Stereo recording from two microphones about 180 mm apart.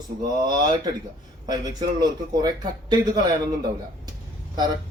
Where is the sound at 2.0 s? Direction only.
20° right (ahead or behind).